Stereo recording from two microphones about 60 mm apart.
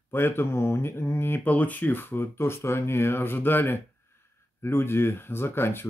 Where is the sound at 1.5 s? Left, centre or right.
Left.